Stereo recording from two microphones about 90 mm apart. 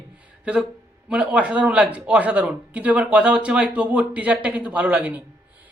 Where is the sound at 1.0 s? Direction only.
10° right (ahead or behind).